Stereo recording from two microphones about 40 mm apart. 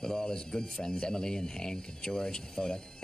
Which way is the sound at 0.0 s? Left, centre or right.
Centre.